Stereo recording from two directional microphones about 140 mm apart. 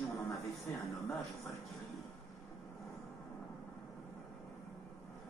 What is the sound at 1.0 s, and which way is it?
Speech, centre (ahead or behind).